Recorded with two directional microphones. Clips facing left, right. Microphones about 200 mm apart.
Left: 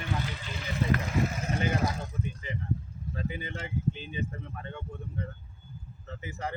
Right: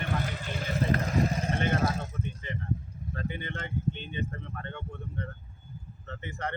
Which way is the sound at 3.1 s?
5° left (ahead or behind).